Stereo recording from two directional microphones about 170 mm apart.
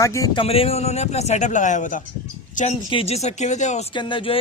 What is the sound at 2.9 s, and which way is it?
A man's voice, 35° left (ahead or behind).